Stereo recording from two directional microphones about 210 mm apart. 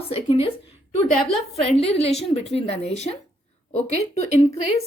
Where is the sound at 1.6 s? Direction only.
30° left (ahead or behind).